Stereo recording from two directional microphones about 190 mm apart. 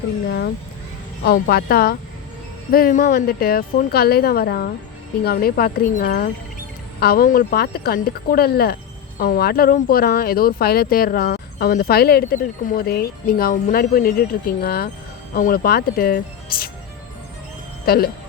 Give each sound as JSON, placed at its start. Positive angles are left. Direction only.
{"t": 0.3, "sound": "speech", "side_deg": 60}
{"t": 17.8, "sound": "speech", "side_deg": 55}